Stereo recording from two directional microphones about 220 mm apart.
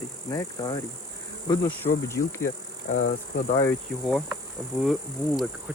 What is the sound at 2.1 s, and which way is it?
Speech, 15° left (ahead or behind).